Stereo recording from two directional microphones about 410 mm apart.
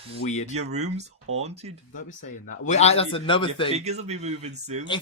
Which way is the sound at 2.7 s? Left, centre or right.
Centre.